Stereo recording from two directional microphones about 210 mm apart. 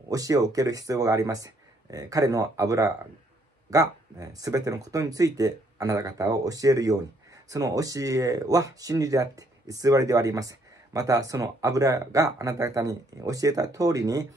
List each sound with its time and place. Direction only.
0.1 s speech: 15° right (ahead or behind)